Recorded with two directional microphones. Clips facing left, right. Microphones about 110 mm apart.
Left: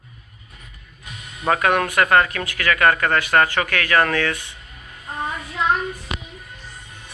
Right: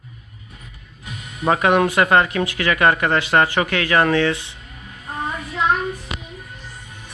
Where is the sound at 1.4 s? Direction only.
20° right (ahead or behind).